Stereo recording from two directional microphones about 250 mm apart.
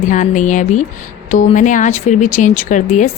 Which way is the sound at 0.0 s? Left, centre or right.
Left.